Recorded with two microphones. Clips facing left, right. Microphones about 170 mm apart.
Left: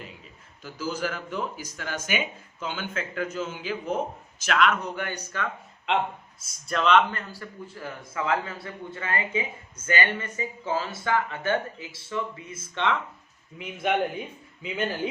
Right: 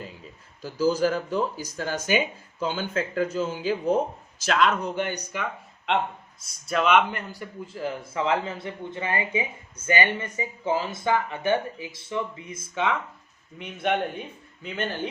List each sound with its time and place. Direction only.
0.6 s speech: 35° right (ahead or behind); by 5.5 s 15° right (ahead or behind)
6.7 s speech: 5° right (ahead or behind)
13.6 s speech: 5° left (ahead or behind)